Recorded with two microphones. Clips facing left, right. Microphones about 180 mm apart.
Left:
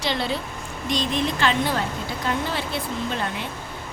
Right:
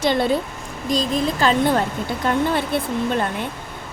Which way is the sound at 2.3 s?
55° right (ahead or behind).